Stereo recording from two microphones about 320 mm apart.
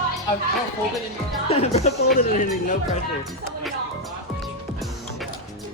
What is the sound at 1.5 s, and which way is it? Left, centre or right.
Speech, centre.